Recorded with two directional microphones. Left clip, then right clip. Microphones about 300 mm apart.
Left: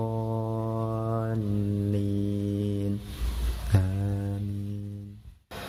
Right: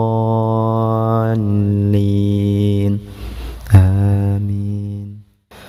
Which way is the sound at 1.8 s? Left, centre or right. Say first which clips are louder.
Right 13 dB; right.